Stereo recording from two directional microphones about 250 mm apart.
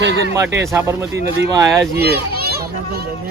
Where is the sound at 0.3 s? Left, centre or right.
Centre.